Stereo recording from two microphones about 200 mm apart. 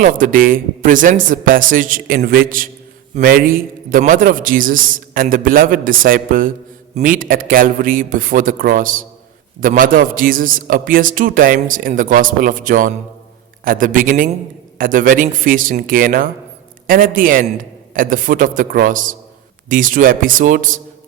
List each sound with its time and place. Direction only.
0.0 s a man's voice: 40° right (ahead or behind)